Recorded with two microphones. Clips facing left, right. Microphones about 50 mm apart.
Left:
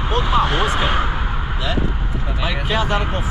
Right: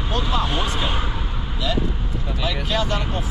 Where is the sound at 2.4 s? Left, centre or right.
Left.